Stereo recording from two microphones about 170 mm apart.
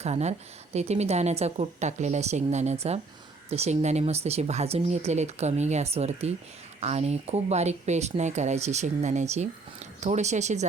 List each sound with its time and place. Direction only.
0.0 s a woman's voice: 40° right (ahead or behind)